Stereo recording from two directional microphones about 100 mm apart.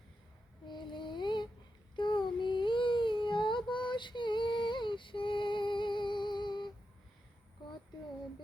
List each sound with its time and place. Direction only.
0.7 s female singing: 50° left (ahead or behind)
2.0 s child singing: 50° left (ahead or behind)